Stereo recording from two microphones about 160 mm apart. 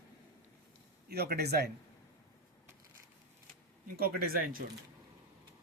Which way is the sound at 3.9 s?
70° right (ahead or behind).